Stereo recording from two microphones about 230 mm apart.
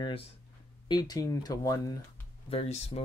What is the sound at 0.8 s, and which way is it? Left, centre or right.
Speech, centre.